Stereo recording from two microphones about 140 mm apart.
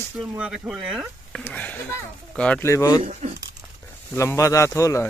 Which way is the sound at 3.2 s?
50° right (ahead or behind).